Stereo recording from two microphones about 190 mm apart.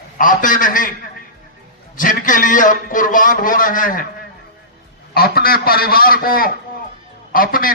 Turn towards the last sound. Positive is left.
turn(degrees=50)  # may be behind; listen again after turning